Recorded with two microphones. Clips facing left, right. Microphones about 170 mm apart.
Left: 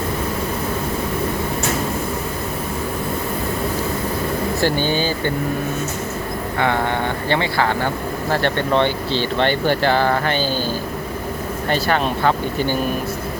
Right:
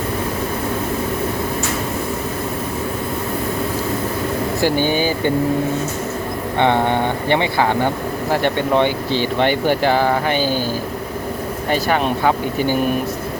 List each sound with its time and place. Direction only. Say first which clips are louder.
4.6 s speech: right 3 dB; 15° right (ahead or behind)
6.6 s speech: right 4 dB; 20° right (ahead or behind)
11.7 s speech: right 1 dB; 10° right (ahead or behind)